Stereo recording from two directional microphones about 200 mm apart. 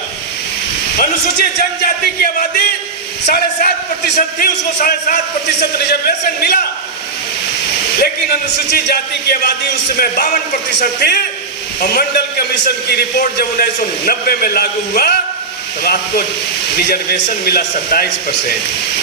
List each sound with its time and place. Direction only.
1.8 s a man's voice: 50° left (ahead or behind)
8.0 s a man's voice: 50° left (ahead or behind)
10.7 s a man's voice: 55° left (ahead or behind)